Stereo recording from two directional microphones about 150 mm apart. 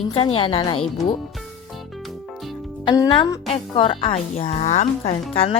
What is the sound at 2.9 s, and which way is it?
A woman's voice, 30° left (ahead or behind).